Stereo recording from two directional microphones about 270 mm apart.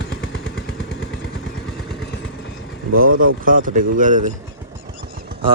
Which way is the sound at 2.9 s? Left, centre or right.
Right.